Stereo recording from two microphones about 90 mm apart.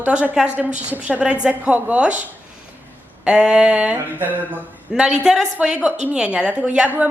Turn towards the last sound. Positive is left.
turn(degrees=-15)  # may be behind; listen again after turning